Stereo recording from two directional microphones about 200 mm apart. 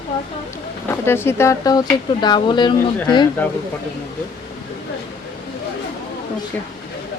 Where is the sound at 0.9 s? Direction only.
10° left (ahead or behind).